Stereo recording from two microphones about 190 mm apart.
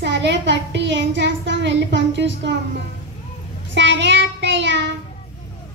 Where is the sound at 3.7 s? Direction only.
70° right (ahead or behind).